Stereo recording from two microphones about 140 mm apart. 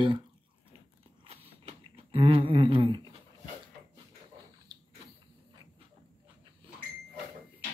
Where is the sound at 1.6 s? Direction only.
40° right (ahead or behind).